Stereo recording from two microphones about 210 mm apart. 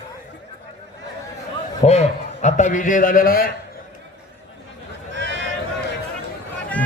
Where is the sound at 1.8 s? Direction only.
30° left (ahead or behind).